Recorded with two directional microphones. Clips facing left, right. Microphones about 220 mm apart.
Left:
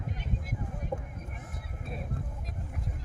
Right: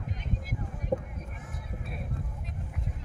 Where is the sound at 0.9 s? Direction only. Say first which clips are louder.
Right 7 dB; 35° right (ahead or behind).